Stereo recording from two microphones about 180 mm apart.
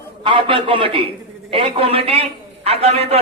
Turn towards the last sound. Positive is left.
turn(degrees=-35)  # may be behind; listen again after turning